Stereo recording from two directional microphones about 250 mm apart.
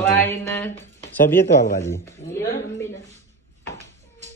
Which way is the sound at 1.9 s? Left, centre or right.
Centre.